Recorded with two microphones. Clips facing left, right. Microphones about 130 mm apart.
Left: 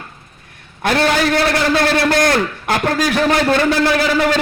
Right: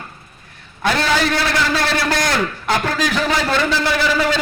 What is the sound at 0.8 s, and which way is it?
A man's voice, 55° left (ahead or behind).